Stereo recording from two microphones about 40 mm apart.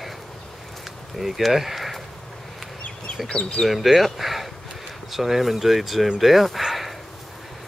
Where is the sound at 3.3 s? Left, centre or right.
Centre.